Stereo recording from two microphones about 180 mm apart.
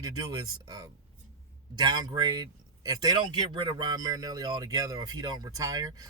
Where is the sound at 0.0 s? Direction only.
20° right (ahead or behind).